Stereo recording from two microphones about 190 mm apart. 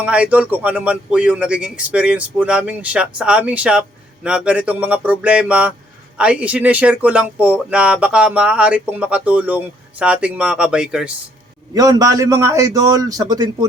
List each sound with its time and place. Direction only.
0.0 s speech: 5° right (ahead or behind)
11.7 s a man's voice: 20° right (ahead or behind)